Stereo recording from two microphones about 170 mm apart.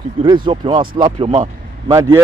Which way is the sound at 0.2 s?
30° right (ahead or behind).